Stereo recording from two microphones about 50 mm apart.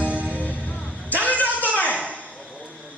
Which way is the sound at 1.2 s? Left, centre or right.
Left.